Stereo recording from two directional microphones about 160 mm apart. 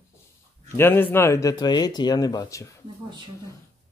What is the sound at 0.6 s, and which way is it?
Speech, 15° left (ahead or behind).